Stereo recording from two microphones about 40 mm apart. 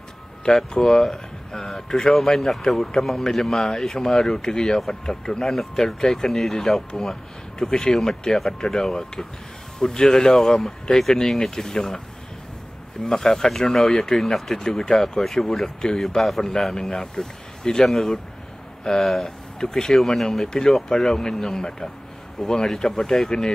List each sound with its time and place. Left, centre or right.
0.6 s speech: centre
13.0 s speech: centre